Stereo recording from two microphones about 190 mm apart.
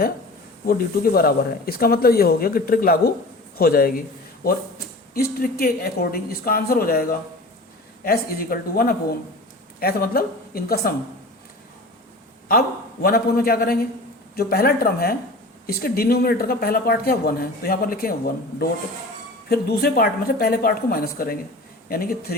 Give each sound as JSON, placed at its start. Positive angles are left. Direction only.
{"t": 0.6, "sound": "speech", "side_deg": 50}
{"t": 5.1, "sound": "speech", "side_deg": 55}
{"t": 12.5, "sound": "speech", "side_deg": 50}
{"t": 19.5, "sound": "speech", "side_deg": 55}